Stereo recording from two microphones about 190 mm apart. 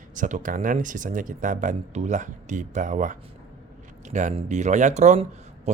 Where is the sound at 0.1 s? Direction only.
40° right (ahead or behind).